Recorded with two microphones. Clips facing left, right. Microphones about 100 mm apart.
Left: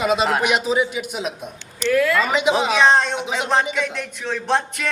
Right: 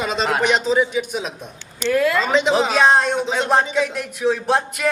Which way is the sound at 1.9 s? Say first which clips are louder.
Even; 20° right (ahead or behind).